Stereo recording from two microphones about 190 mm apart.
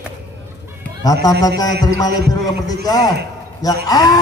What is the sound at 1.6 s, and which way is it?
Speech, 20° left (ahead or behind).